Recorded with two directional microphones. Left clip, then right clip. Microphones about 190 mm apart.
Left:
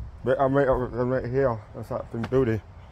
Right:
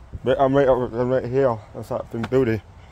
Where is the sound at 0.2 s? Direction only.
30° right (ahead or behind).